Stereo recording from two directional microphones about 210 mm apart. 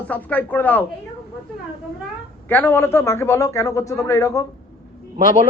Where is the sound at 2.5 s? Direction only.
10° left (ahead or behind).